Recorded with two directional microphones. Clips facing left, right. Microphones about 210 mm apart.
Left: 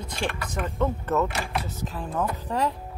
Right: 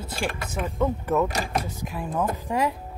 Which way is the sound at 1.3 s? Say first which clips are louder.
Right 3 dB; 40° right (ahead or behind).